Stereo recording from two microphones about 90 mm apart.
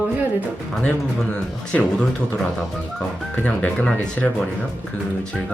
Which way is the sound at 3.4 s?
10° left (ahead or behind).